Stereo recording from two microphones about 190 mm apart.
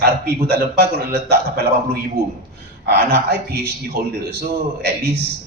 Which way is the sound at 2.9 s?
55° right (ahead or behind).